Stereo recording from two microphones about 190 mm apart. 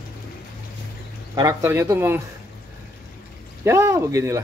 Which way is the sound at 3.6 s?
15° right (ahead or behind).